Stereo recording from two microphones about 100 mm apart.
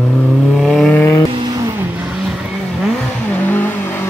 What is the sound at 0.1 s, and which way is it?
Vehicle, 5° left (ahead or behind).